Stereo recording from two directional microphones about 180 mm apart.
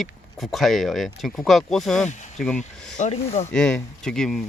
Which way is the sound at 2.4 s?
5° left (ahead or behind).